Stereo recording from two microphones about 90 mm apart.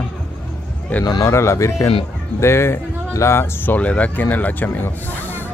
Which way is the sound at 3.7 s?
15° left (ahead or behind).